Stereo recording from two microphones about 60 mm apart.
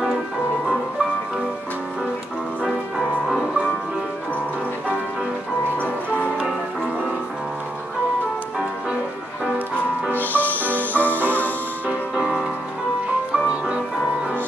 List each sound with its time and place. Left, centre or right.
2.6 s music: centre
10.1 s music: left
13.5 s music: centre